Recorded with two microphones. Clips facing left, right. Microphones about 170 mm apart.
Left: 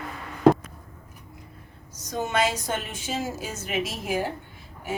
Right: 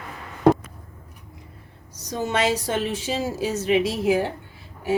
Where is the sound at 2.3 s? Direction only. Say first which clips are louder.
Right 3 dB; 35° right (ahead or behind).